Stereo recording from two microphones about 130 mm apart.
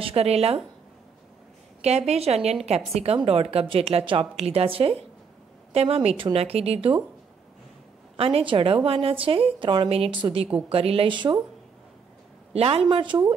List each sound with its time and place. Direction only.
0.0 s a woman's voice: 50° right (ahead or behind)
1.8 s a woman's voice: 55° right (ahead or behind)
8.2 s a woman's voice: 50° right (ahead or behind)
12.5 s a woman's voice: 50° right (ahead or behind)
12.8 s speech: 40° right (ahead or behind)